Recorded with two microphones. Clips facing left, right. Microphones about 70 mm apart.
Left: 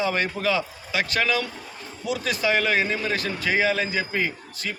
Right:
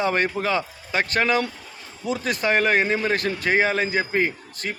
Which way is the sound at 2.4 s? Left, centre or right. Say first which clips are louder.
Right 3 dB; right.